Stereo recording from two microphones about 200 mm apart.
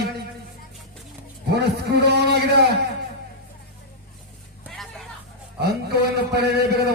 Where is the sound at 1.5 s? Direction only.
55° right (ahead or behind).